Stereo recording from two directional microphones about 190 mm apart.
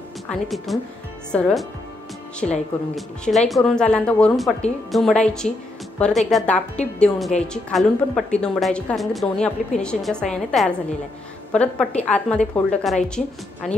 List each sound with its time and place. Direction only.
0.3 s a woman's voice: centre (ahead or behind)